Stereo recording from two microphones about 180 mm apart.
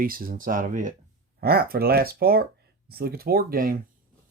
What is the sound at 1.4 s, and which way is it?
Speech, 60° right (ahead or behind).